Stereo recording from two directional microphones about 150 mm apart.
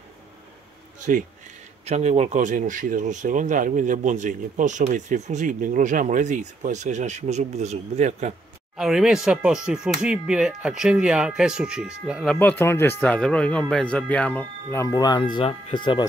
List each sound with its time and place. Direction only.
0.9 s speech: 55° right (ahead or behind)
1.9 s speech: 45° right (ahead or behind)
8.7 s speech: 5° right (ahead or behind)
12.3 s speech: 10° left (ahead or behind)
14.9 s speech: 25° left (ahead or behind)